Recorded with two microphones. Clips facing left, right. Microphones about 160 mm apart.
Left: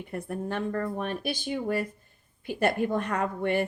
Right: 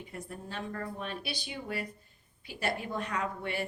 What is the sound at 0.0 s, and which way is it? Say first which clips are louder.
Speech: left 9 dB; 55° left (ahead or behind).